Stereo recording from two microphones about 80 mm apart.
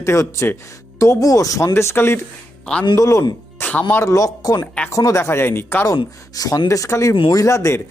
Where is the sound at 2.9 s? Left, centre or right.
Left.